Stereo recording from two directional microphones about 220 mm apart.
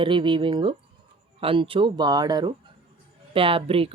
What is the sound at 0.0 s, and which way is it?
Speech, 20° right (ahead or behind).